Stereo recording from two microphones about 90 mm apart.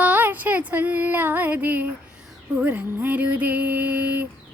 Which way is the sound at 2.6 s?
20° right (ahead or behind).